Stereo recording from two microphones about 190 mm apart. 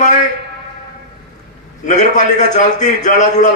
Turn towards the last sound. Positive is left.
turn(degrees=40)  # may be behind; listen again after turning